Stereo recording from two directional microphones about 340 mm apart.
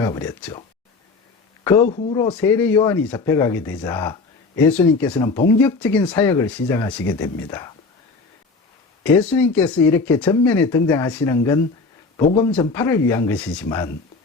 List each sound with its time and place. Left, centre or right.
0.0 s speech: centre
1.6 s speech: centre
9.0 s speech: centre
12.1 s speech: centre
12.5 s speech: centre